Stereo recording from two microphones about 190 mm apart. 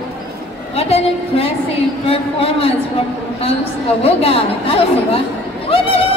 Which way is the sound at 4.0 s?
30° left (ahead or behind).